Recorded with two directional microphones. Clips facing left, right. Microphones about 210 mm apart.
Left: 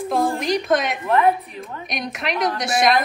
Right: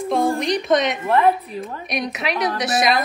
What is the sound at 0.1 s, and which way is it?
Speech, centre (ahead or behind).